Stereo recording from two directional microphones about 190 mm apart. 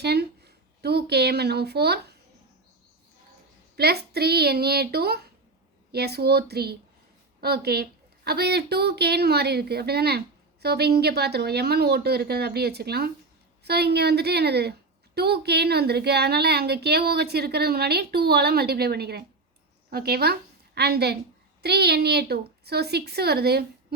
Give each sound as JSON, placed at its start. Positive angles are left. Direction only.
{"t": 0.0, "sound": "a woman's voice", "side_deg": -60}
{"t": 3.8, "sound": "a woman's voice", "side_deg": -55}